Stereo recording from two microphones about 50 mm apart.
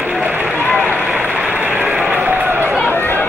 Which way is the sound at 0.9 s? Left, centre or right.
Right.